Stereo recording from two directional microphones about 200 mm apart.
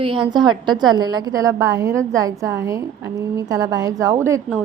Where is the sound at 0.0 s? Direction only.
25° right (ahead or behind).